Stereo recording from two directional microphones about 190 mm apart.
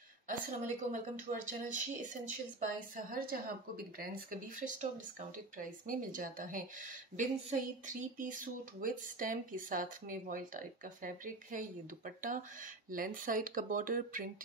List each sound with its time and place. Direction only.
0.3 s a woman's voice: 40° right (ahead or behind)